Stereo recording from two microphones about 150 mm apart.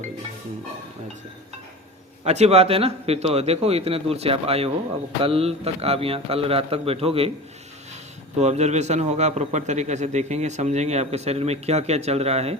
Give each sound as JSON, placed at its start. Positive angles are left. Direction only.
{"t": 2.2, "sound": "a man's voice", "side_deg": -45}
{"t": 8.4, "sound": "a man's voice", "side_deg": -45}